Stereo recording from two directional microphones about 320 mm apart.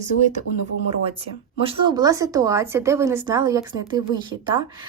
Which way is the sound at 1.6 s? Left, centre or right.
Centre.